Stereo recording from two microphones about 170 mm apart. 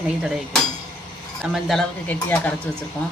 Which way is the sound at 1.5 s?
Centre (ahead or behind).